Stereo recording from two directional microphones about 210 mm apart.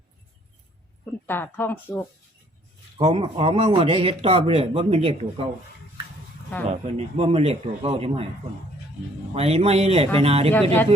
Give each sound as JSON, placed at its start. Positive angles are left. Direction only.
{"t": 1.3, "sound": "speech", "side_deg": 10}
{"t": 3.0, "sound": "speech", "side_deg": -30}
{"t": 6.7, "sound": "speech", "side_deg": -30}
{"t": 9.3, "sound": "speech", "side_deg": -30}
{"t": 10.5, "sound": "speech", "side_deg": 10}